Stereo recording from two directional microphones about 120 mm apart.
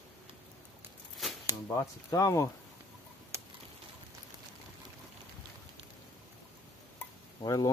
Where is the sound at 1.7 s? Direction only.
30° left (ahead or behind).